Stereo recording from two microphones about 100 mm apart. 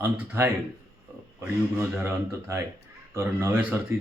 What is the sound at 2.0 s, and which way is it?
Speech, 30° right (ahead or behind).